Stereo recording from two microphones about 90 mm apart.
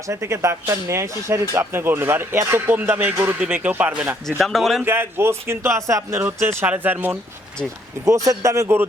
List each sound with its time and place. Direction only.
0.1 s speech: 35° right (ahead or behind)
4.3 s a man's voice: centre (ahead or behind)
4.8 s speech: 25° right (ahead or behind)
8.0 s speech: 40° right (ahead or behind)